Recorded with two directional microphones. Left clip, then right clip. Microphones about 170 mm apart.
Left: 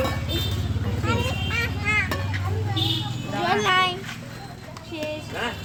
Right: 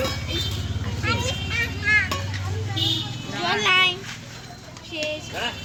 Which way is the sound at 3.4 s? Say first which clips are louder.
Right 1 dB; 20° left (ahead or behind).